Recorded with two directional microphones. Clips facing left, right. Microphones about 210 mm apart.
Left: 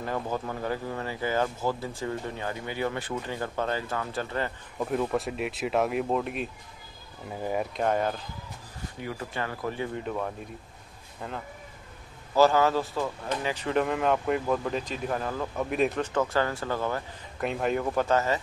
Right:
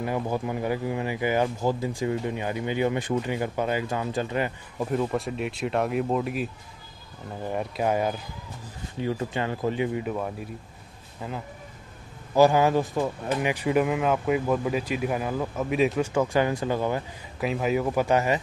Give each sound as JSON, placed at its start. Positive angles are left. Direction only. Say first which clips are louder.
{"t": 0.0, "sound": "speech", "louder": "right 4 dB", "side_deg": -10}
{"t": 4.7, "sound": "speech", "louder": "right 1 dB", "side_deg": -5}
{"t": 7.7, "sound": "speech", "louder": "right 3 dB", "side_deg": -10}
{"t": 9.0, "sound": "speech", "louder": "right 6 dB", "side_deg": -25}
{"t": 9.9, "sound": "speech", "louder": "right 3 dB", "side_deg": -10}
{"t": 12.4, "sound": "speech", "louder": "right 2 dB", "side_deg": -15}
{"t": 17.4, "sound": "speech", "louder": "right 3 dB", "side_deg": -5}